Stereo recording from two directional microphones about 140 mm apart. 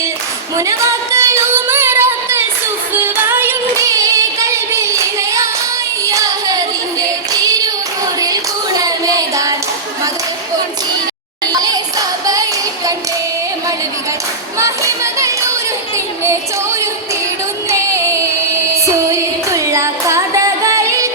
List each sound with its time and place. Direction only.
0.5 s female singing: 20° right (ahead or behind)
2.9 s singing: 15° right (ahead or behind)
11.5 s a sound: 30° right (ahead or behind)
14.6 s music: 20° right (ahead or behind)
17.7 s music: 20° right (ahead or behind)